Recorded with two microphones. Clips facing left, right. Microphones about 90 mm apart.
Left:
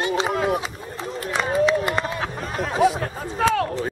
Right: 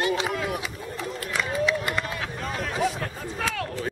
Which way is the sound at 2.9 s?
35° left (ahead or behind).